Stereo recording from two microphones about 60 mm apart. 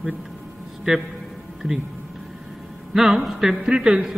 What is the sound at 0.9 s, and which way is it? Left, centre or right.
Speech, centre.